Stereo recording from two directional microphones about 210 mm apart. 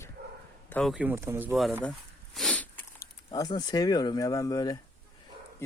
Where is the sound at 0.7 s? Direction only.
Centre (ahead or behind).